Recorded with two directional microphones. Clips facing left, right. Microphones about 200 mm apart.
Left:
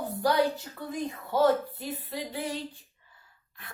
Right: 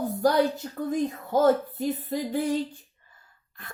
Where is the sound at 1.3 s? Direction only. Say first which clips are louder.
Right 3 dB; 45° right (ahead or behind).